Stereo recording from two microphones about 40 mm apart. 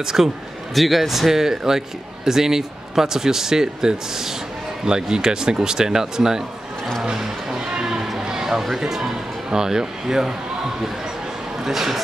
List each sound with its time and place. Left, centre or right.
0.0 s a man's voice: centre
0.7 s a man's voice: centre
7.8 s music: centre
11.6 s a man's voice: centre